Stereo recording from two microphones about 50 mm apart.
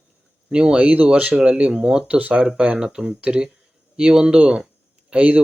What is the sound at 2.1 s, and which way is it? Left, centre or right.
Speech, right.